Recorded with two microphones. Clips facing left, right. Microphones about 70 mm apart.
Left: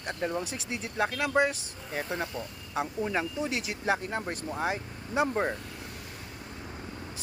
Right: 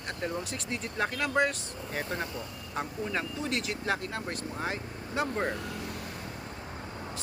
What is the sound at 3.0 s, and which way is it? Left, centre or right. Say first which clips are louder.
Speech: left 2 dB; centre.